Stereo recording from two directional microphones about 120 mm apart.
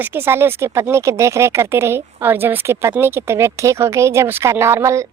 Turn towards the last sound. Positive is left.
turn(degrees=-25)  # may be behind; listen again after turning